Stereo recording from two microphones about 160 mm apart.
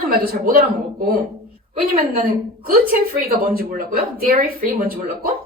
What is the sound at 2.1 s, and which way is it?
A woman's voice, 65° right (ahead or behind).